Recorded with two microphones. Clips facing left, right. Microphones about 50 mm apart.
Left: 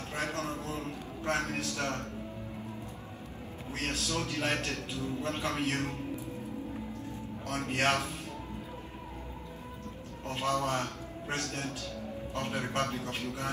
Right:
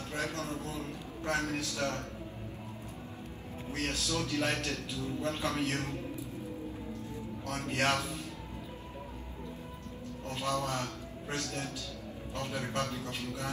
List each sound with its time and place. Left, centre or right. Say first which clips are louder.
0.1 s a sound: left 1 dB; left
3.7 s a man's voice: even; left
7.4 s a man's voice: left 2 dB; left
10.2 s a man's voice: left 3 dB; left